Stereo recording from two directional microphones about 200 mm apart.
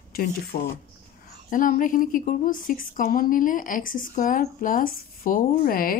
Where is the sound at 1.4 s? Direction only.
40° left (ahead or behind).